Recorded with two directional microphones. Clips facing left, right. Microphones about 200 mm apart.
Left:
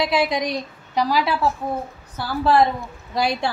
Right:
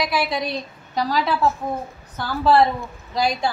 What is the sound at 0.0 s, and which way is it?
A woman's voice, 20° left (ahead or behind).